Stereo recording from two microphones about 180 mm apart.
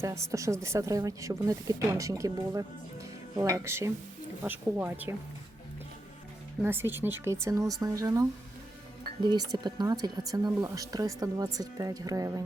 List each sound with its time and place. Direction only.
0.0 s a woman's voice: 15° right (ahead or behind)
6.6 s a woman's voice: 10° right (ahead or behind)